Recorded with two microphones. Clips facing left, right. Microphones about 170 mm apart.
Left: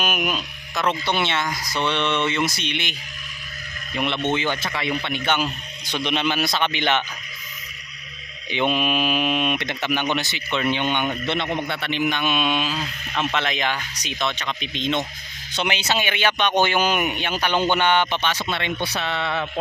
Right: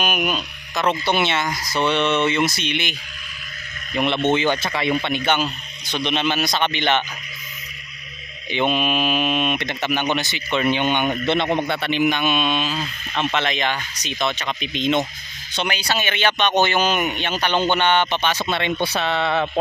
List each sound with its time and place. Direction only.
0.0 s speech: centre (ahead or behind)
4.3 s speech: 20° right (ahead or behind)
5.2 s speech: centre (ahead or behind)
8.4 s speech: centre (ahead or behind); by 11.3 s 15° right (ahead or behind)
11.4 s a man's voice: 55° right (ahead or behind)
11.8 s speech: 15° right (ahead or behind); by 14.3 s 5° left (ahead or behind)
14.3 s speech: 10° right (ahead or behind)
15.6 s speech: 20° left (ahead or behind)
18.2 s speech: 45° right (ahead or behind)
18.5 s speech: 25° right (ahead or behind)
18.9 s speech: 80° right